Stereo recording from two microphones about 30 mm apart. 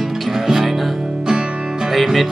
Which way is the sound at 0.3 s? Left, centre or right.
Centre.